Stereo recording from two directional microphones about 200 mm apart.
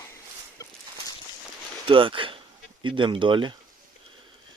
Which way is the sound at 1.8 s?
25° right (ahead or behind).